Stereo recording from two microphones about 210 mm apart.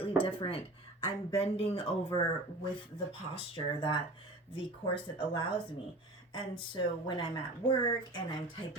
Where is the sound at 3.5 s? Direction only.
25° left (ahead or behind).